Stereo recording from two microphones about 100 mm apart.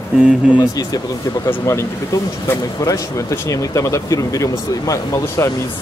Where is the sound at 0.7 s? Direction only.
40° left (ahead or behind).